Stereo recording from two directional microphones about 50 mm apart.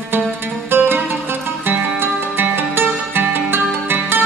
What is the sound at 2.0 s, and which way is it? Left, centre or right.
Music, right.